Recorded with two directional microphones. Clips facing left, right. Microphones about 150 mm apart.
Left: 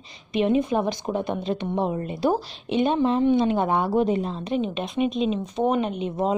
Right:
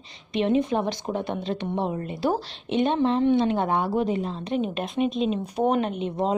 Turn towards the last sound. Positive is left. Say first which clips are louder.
# even
turn(degrees=0)  # may be behind; listen again after turning